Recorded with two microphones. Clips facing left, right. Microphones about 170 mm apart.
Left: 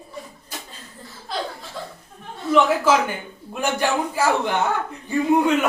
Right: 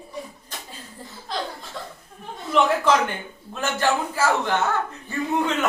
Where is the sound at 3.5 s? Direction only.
15° left (ahead or behind).